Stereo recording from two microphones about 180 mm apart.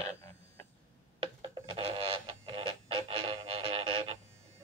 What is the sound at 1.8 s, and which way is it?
Music, 30° right (ahead or behind).